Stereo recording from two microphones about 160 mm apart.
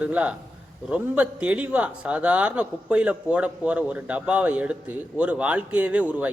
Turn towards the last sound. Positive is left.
turn(degrees=-10)  # may be behind; listen again after turning